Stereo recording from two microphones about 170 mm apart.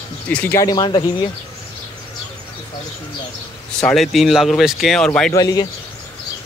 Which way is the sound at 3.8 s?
Centre (ahead or behind).